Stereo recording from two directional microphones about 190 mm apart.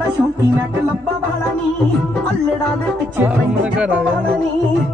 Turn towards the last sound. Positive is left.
turn(degrees=-5)  # may be behind; listen again after turning